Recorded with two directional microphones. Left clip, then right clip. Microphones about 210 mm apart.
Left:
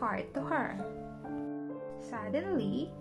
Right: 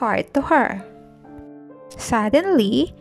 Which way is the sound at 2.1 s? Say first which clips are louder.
Right 18 dB; 45° right (ahead or behind).